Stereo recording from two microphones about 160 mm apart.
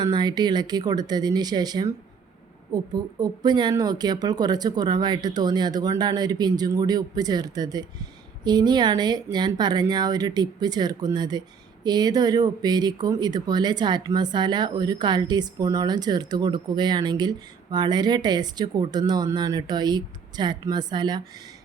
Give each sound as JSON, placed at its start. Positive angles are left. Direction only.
{"t": 0.0, "sound": "speech", "side_deg": -25}